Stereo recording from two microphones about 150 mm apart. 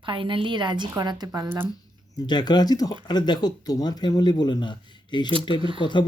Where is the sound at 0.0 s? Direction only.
35° right (ahead or behind).